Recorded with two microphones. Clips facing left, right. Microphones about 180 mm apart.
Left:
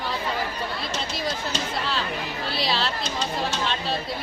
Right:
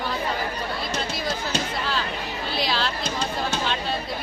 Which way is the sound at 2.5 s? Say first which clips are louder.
Right 1 dB; centre (ahead or behind).